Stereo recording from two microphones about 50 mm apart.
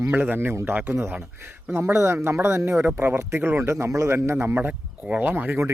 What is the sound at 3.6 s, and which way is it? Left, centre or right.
Speech, right.